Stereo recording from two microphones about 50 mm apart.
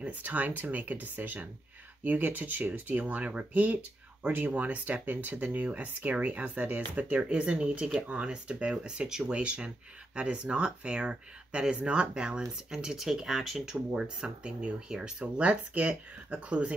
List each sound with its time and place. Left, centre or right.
0.0 s speech: right